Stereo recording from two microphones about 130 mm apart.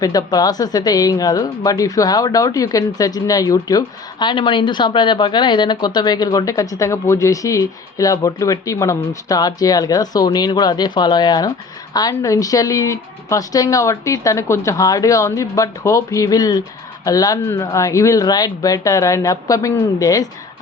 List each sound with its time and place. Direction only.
0.0 s a woman's voice: 30° left (ahead or behind)